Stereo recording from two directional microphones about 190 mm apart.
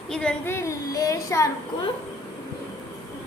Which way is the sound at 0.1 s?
5° left (ahead or behind).